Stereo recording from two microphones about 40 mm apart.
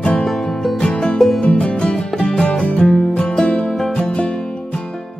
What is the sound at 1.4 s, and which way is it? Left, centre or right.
Music, left.